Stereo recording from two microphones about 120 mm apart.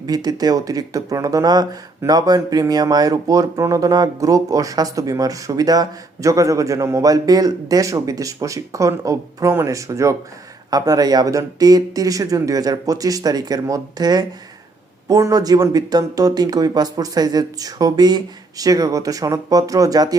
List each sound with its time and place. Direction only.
0.0 s speech: 35° right (ahead or behind)